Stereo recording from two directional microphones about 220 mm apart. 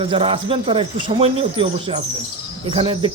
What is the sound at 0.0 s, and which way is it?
Speech, 25° right (ahead or behind).